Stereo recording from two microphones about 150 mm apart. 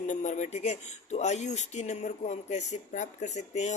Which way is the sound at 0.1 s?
55° left (ahead or behind).